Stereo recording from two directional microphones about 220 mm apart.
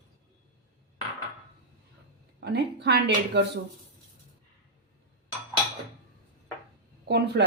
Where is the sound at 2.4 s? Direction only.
50° right (ahead or behind).